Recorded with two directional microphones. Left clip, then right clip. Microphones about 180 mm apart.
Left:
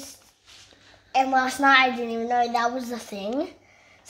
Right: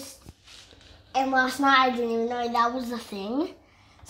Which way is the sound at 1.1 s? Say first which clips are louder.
Left 2 dB; 20° left (ahead or behind).